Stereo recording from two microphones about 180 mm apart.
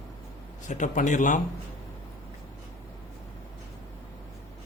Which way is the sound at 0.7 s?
45° left (ahead or behind).